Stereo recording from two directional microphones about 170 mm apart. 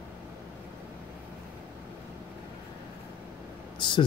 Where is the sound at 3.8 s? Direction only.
30° left (ahead or behind).